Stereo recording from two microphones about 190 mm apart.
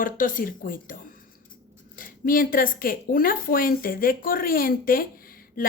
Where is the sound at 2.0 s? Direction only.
45° left (ahead or behind).